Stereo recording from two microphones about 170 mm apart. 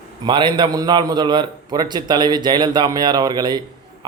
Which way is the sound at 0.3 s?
30° right (ahead or behind).